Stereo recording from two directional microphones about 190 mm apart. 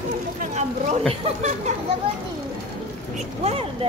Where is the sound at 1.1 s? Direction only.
35° right (ahead or behind).